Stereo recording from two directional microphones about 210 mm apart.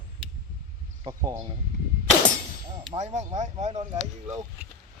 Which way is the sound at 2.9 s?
35° right (ahead or behind).